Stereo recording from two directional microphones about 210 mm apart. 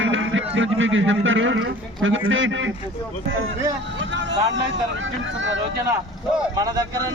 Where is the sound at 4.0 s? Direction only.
60° right (ahead or behind).